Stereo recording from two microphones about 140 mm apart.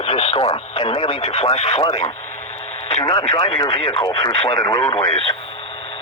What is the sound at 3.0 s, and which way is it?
Speech, 30° left (ahead or behind).